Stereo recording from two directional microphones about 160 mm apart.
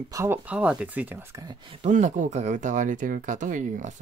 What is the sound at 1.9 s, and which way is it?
Speech, 50° right (ahead or behind).